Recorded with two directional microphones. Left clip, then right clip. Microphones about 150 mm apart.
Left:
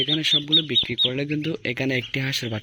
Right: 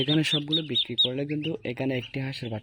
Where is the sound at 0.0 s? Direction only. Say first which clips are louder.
Left 4 dB; 65° right (ahead or behind).